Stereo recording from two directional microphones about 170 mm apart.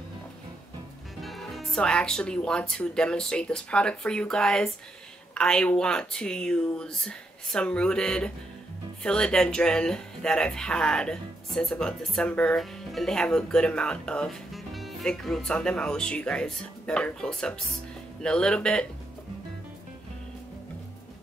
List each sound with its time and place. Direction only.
1.2 s speech: centre (ahead or behind)